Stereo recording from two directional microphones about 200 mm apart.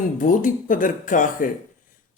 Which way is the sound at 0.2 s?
40° left (ahead or behind).